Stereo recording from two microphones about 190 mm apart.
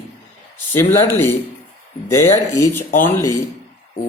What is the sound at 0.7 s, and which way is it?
Speech, 10° left (ahead or behind).